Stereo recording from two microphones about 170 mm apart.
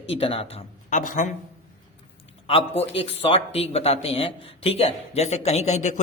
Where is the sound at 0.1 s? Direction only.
35° left (ahead or behind).